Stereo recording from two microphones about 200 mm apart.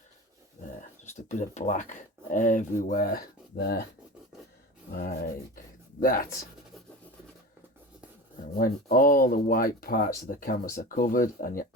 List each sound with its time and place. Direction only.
1.3 s speech: 35° left (ahead or behind)
4.9 s speech: 45° left (ahead or behind)
8.5 s speech: 45° left (ahead or behind)